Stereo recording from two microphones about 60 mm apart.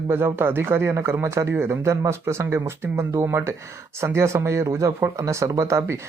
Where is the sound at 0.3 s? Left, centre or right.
Right.